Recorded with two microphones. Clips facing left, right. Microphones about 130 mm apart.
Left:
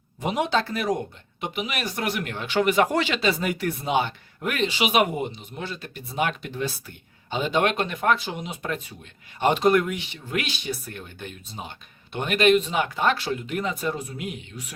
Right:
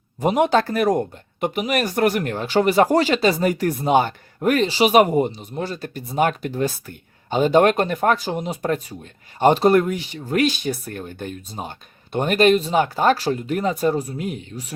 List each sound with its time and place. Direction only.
0.2 s speech: 50° right (ahead or behind)